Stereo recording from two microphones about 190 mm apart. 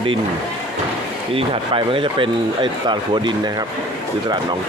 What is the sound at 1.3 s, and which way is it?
Speech, 30° right (ahead or behind).